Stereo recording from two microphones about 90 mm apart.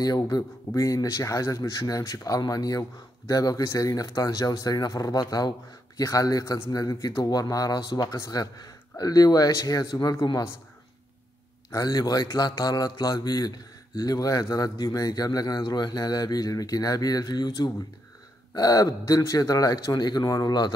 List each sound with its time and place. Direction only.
0.0 s speech: 45° left (ahead or behind)
11.7 s speech: 45° left (ahead or behind)